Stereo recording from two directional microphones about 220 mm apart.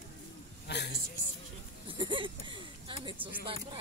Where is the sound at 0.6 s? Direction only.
50° left (ahead or behind).